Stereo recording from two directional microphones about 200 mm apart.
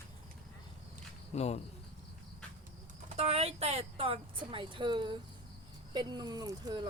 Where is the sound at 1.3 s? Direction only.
30° left (ahead or behind).